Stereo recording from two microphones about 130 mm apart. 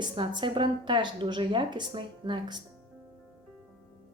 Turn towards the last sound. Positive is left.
turn(degrees=-35)  # may be behind; listen again after turning